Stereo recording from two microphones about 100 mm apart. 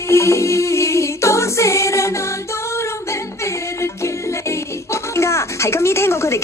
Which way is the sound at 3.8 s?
30° left (ahead or behind).